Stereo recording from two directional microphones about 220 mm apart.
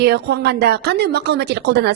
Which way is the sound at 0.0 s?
50° right (ahead or behind).